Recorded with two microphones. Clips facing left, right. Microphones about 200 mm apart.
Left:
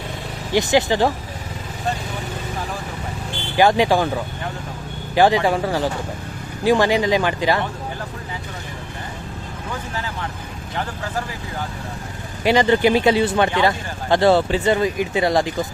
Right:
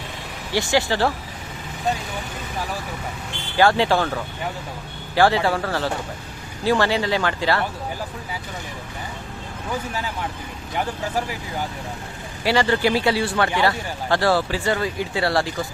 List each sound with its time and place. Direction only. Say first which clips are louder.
0.5 s speech: left 4 dB; 20° left (ahead or behind)
3.6 s speech: left 2 dB; 15° left (ahead or behind)
12.4 s speech: left 4 dB; 20° left (ahead or behind)